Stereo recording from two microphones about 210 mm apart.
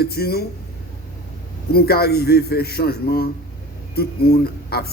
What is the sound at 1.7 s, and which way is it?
A man's voice, 50° left (ahead or behind).